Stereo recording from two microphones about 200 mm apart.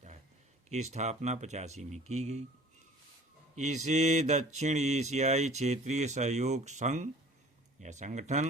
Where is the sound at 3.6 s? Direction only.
35° right (ahead or behind).